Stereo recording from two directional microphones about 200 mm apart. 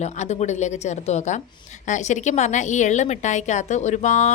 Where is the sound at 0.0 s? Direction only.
35° left (ahead or behind).